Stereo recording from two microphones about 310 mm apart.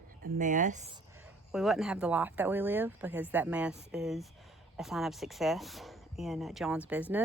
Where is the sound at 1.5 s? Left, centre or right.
Centre.